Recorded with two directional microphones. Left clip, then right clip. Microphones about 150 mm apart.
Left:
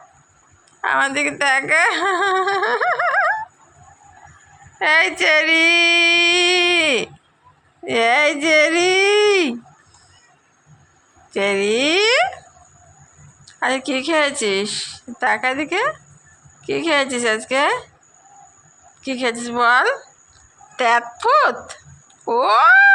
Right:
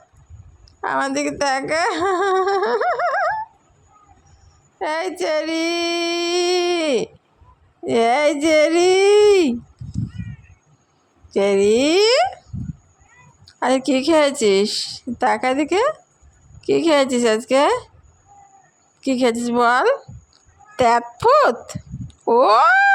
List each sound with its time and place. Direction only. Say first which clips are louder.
0.8 s speech: left 3 dB; 50° right (ahead or behind)
4.8 s a sound: left 7 dB; 45° right (ahead or behind)
11.3 s speech: right 3 dB; 50° right (ahead or behind)
13.4 s speech: right 2 dB; 60° right (ahead or behind)
19.0 s a woman's voice: right 3 dB; 60° right (ahead or behind)